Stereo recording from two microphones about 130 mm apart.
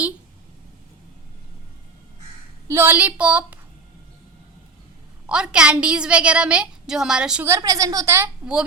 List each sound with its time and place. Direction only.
2.6 s a woman's voice: 20° right (ahead or behind)
5.2 s a woman's voice: 5° right (ahead or behind)
7.4 s a woman's voice: 25° right (ahead or behind)